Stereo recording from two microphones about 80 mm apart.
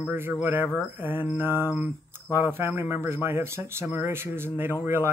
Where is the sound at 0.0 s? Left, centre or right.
Right.